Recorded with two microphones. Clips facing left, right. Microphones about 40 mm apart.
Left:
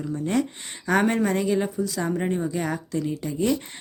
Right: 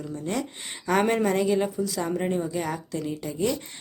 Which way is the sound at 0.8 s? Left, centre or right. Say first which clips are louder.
Left 1 dB; centre.